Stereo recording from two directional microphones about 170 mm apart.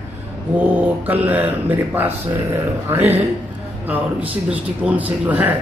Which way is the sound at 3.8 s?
10° right (ahead or behind).